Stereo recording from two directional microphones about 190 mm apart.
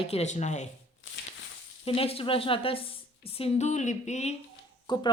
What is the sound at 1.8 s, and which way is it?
Speech, 30° left (ahead or behind).